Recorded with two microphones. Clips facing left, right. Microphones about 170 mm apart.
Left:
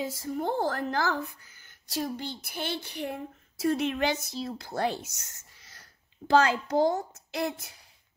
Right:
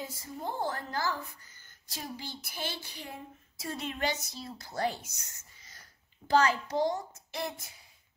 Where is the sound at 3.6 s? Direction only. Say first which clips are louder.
Left 8 dB; 70° left (ahead or behind).